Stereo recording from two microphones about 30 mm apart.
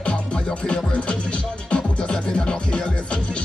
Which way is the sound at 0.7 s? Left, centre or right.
Left.